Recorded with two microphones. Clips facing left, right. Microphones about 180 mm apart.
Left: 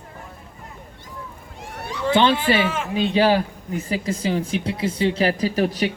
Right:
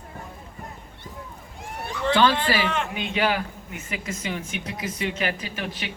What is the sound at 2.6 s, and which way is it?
Speech, 5° left (ahead or behind).